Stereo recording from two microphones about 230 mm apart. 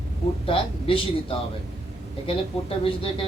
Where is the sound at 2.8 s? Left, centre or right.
Left.